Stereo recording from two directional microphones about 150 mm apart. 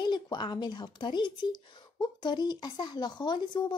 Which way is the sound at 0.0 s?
30° left (ahead or behind).